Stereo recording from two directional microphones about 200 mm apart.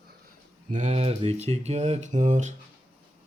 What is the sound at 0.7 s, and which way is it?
Speech, 35° right (ahead or behind).